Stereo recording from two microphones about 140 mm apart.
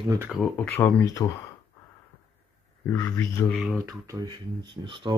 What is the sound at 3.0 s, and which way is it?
Speech, 20° left (ahead or behind).